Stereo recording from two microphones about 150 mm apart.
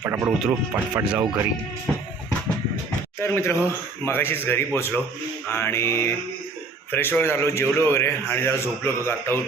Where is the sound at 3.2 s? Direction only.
15° left (ahead or behind).